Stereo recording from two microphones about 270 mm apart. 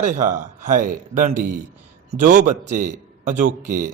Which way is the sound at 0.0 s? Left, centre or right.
Right.